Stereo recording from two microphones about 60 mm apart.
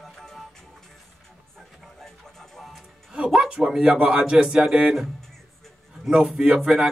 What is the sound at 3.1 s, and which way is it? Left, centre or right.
Music, centre.